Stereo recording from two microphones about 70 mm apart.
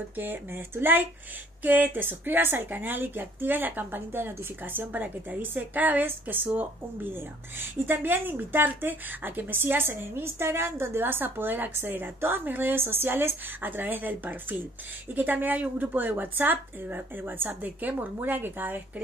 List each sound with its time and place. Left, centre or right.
0.2 s a woman's voice: right